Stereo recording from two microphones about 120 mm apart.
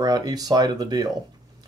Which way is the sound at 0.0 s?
30° right (ahead or behind).